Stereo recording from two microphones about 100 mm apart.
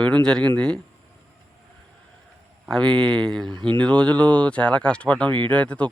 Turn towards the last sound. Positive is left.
turn(degrees=10)  # may be behind; listen again after turning